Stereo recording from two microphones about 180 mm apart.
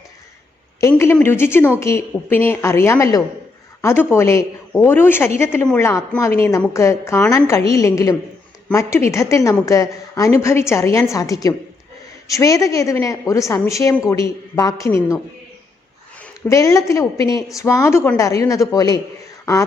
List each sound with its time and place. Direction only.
0.8 s a woman's voice: 15° left (ahead or behind)
16.5 s a woman's voice: 15° left (ahead or behind)